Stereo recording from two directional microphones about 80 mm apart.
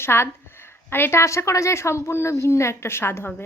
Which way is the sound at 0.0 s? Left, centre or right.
Left.